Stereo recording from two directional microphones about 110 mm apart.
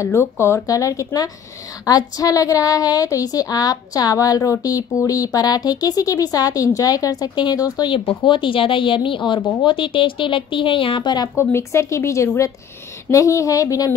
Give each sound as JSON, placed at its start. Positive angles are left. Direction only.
{"t": 0.0, "sound": "speech", "side_deg": 25}
{"t": 7.9, "sound": "speech", "side_deg": 55}
{"t": 11.3, "sound": "speech", "side_deg": 25}